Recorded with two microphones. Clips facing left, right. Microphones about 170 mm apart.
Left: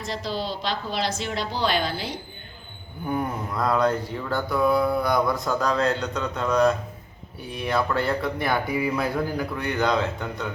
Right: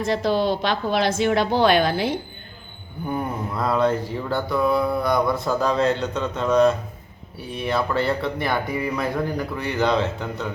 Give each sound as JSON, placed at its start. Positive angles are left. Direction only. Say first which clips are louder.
{"t": 0.1, "sound": "a woman's voice", "louder": "right 8 dB", "side_deg": -55}
{"t": 3.1, "sound": "mantra", "louder": "even", "side_deg": -5}